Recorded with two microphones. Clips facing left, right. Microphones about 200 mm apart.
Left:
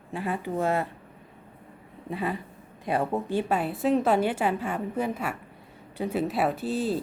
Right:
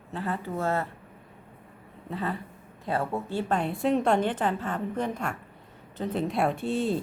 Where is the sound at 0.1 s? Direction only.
10° left (ahead or behind).